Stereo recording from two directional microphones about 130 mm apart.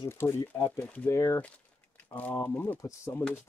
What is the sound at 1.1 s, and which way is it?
Speech, 25° left (ahead or behind).